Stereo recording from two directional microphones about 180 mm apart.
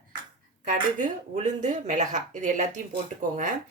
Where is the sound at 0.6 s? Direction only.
45° right (ahead or behind).